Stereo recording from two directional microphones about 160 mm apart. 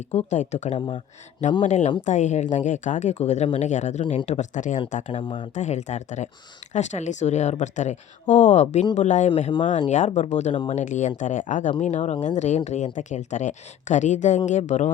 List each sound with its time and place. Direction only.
0.1 s speech: 45° left (ahead or behind)
4.0 s speech: 30° left (ahead or behind)
4.3 s speech: 50° left (ahead or behind)
5.2 s speech: 30° left (ahead or behind)
5.5 s speech: 45° left (ahead or behind)